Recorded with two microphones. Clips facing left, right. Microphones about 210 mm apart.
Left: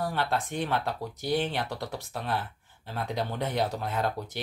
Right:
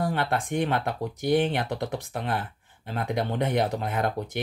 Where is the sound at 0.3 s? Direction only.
15° right (ahead or behind).